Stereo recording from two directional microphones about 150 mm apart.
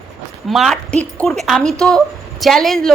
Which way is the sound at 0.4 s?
Centre (ahead or behind).